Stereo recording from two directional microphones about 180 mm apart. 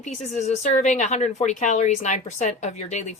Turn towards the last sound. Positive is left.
turn(degrees=40)  # may be behind; listen again after turning